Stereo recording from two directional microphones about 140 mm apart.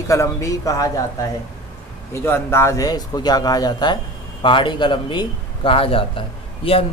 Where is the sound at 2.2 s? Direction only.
15° left (ahead or behind); by 6.9 s 40° left (ahead or behind).